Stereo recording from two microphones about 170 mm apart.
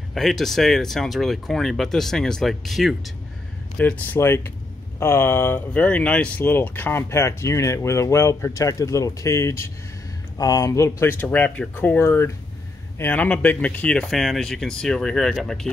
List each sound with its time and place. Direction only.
0.1 s speech: centre (ahead or behind)